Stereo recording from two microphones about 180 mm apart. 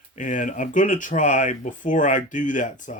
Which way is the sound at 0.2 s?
45° left (ahead or behind).